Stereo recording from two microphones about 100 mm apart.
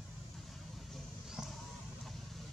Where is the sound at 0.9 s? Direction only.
Centre (ahead or behind).